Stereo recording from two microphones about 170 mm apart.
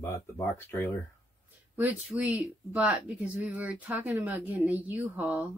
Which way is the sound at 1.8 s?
10° right (ahead or behind).